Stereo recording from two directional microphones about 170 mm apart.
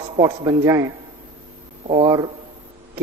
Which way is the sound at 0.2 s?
20° right (ahead or behind).